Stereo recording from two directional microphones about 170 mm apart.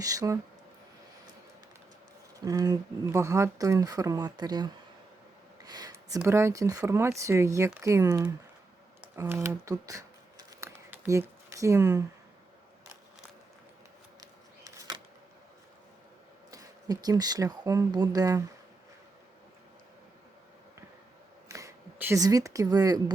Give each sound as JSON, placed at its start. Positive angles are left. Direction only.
{"t": 0.0, "sound": "speech", "side_deg": -20}
{"t": 2.4, "sound": "speech", "side_deg": -20}
{"t": 9.1, "sound": "scissors", "side_deg": -15}
{"t": 14.2, "sound": "a sound", "side_deg": -20}
{"t": 16.5, "sound": "speech", "side_deg": -20}
{"t": 21.5, "sound": "speech", "side_deg": -15}